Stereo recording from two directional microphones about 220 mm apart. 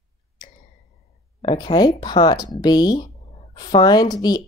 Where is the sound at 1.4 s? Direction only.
20° left (ahead or behind).